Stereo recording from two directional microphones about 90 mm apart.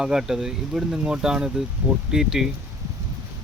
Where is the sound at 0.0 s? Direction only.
5° right (ahead or behind).